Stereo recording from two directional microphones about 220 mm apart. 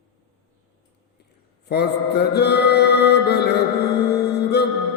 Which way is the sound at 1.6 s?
45° left (ahead or behind).